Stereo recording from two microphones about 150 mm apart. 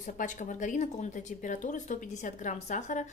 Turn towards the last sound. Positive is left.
turn(degrees=55)  # may be behind; listen again after turning